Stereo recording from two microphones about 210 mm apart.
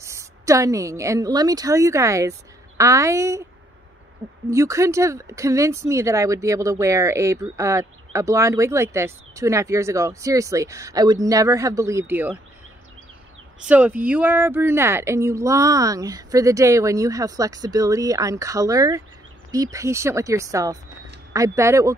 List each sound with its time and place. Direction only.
0.0 s a woman's voice: 15° right (ahead or behind)
4.5 s speech: 15° right (ahead or behind)
13.7 s speech: 5° right (ahead or behind)